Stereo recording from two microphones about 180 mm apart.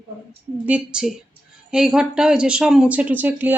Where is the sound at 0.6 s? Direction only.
5° right (ahead or behind).